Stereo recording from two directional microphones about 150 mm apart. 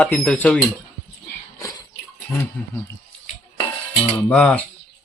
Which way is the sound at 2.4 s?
15° left (ahead or behind).